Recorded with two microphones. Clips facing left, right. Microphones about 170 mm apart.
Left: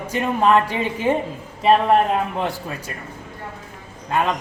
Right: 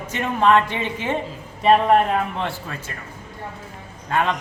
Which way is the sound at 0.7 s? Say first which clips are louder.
Left 3 dB; 40° left (ahead or behind).